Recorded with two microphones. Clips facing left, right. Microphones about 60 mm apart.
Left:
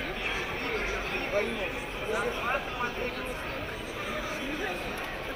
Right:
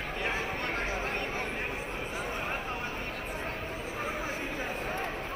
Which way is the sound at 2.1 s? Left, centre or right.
Left.